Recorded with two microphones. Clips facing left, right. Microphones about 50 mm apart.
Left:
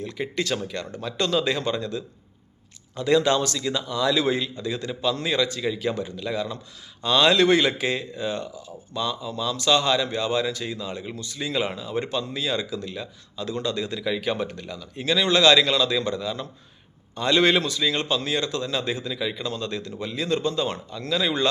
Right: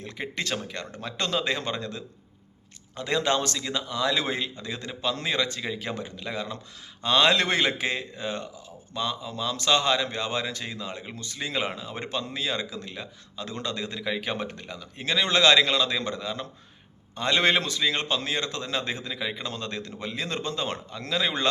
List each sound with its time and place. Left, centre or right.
0.0 s speech: right